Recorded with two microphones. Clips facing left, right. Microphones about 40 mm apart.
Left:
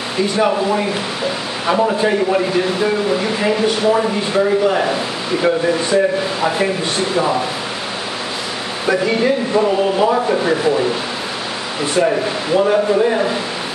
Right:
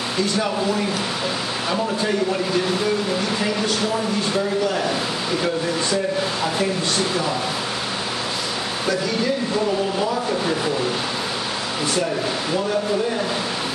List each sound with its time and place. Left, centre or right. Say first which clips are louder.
0.2 s speech: left 7 dB; left
8.8 s speech: left 7 dB; left
10.4 s speech: left 6 dB; centre
11.8 s speech: left 8 dB; left